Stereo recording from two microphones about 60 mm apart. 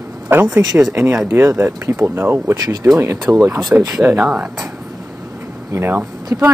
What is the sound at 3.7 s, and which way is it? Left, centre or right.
Speech, right.